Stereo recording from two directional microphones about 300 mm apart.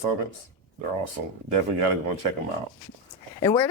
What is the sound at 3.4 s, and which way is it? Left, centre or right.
Speech, centre.